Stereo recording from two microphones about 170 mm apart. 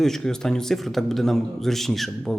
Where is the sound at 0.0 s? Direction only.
5° left (ahead or behind).